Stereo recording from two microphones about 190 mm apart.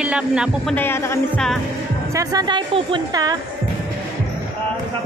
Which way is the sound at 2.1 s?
20° right (ahead or behind).